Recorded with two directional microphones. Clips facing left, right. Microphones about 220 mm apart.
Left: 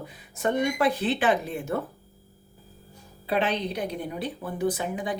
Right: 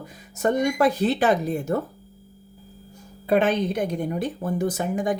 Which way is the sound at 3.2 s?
50° right (ahead or behind).